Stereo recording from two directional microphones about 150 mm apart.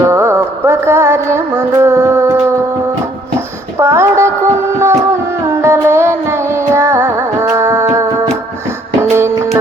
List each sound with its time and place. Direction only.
0.0 s music: 20° right (ahead or behind)
3.8 s a sound: 15° right (ahead or behind)
4.8 s music: 20° right (ahead or behind)